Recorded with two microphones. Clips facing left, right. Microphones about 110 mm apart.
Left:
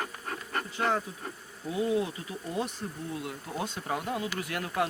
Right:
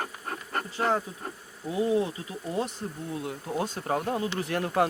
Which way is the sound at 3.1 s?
25° right (ahead or behind).